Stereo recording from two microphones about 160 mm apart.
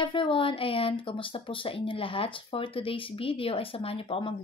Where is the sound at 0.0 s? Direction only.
30° left (ahead or behind).